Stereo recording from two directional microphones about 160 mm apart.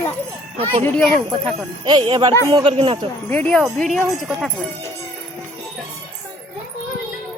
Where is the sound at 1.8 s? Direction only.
30° right (ahead or behind).